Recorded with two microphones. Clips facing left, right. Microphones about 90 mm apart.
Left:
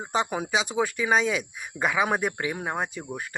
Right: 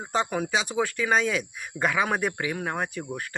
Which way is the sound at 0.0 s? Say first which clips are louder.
Even; 15° left (ahead or behind).